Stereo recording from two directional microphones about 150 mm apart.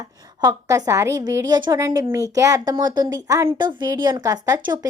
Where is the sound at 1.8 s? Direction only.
20° right (ahead or behind).